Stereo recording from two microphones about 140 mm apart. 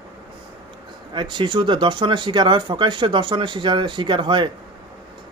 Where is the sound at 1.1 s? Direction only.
35° right (ahead or behind).